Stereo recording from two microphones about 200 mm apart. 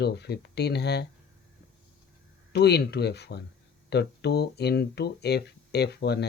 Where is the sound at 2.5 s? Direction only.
55° left (ahead or behind).